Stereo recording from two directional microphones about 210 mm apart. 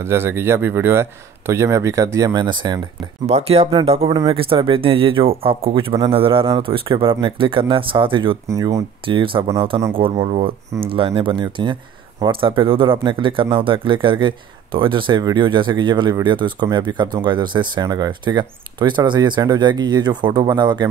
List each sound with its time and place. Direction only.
0.0 s speech: 10° right (ahead or behind)